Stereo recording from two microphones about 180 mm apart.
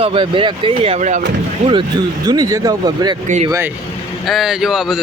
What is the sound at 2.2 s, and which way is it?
Speech, 20° right (ahead or behind).